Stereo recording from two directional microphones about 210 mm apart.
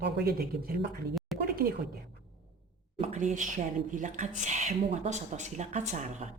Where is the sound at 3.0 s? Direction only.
35° right (ahead or behind).